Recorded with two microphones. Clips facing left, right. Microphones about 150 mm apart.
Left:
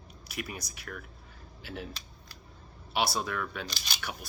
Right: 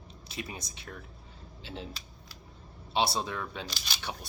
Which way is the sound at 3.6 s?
Centre (ahead or behind).